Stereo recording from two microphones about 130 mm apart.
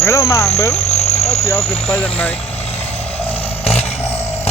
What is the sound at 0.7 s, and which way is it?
Vehicle, 55° left (ahead or behind).